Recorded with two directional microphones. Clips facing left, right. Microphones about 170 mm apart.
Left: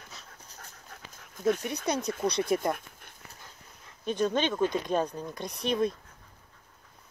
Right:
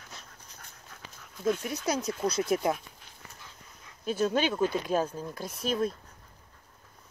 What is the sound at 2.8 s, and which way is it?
Dog, 55° left (ahead or behind).